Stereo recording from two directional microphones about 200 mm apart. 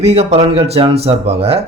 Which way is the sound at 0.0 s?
30° right (ahead or behind).